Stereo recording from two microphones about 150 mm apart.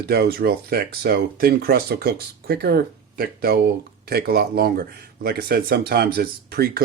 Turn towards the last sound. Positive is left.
turn(degrees=-90)